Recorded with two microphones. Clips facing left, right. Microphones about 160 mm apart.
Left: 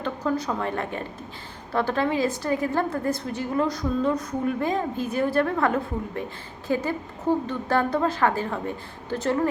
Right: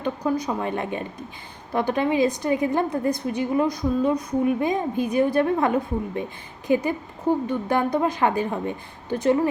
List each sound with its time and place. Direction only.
0.0 s a woman's voice: 15° right (ahead or behind)